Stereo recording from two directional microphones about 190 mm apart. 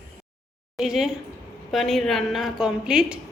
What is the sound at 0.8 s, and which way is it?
A woman's voice, 5° right (ahead or behind).